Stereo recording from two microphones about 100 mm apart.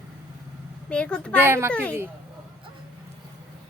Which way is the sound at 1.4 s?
20° right (ahead or behind).